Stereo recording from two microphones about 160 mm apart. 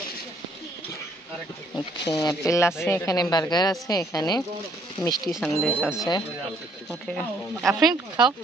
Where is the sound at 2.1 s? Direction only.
20° left (ahead or behind).